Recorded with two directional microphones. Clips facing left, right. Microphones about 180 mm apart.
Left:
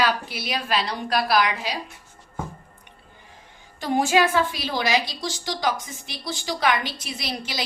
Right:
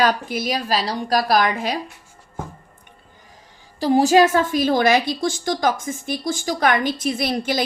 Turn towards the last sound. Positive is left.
turn(degrees=-50)  # may be behind; listen again after turning